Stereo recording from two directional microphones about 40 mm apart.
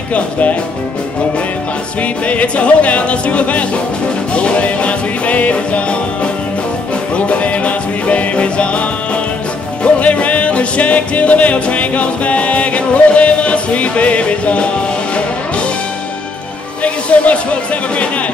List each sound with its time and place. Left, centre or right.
0.1 s music: left
2.0 s music: left
16.8 s speech: left